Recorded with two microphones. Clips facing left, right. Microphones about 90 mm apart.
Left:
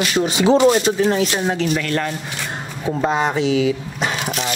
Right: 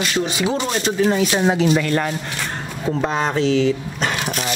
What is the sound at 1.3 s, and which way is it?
Speech, 20° right (ahead or behind).